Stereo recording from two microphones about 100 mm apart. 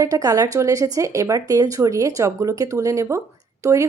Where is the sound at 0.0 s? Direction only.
35° right (ahead or behind).